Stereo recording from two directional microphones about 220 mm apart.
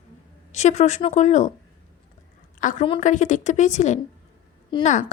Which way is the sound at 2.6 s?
35° left (ahead or behind).